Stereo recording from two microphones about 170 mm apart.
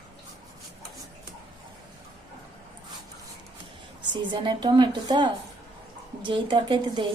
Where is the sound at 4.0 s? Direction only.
30° right (ahead or behind).